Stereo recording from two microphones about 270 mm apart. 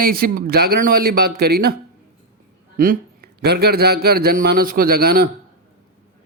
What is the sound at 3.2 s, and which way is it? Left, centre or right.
Speech, right.